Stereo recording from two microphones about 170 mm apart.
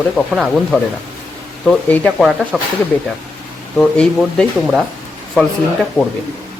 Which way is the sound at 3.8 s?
5° left (ahead or behind).